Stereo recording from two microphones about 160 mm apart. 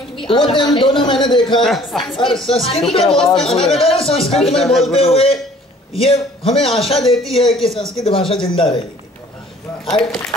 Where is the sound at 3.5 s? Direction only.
35° left (ahead or behind).